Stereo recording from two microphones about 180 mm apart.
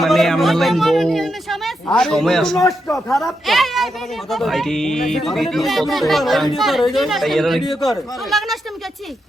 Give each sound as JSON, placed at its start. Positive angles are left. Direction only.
{"t": 0.0, "sound": "a man's voice", "side_deg": 0}
{"t": 2.6, "sound": "a man's voice", "side_deg": 15}
{"t": 2.9, "sound": "speech", "side_deg": 0}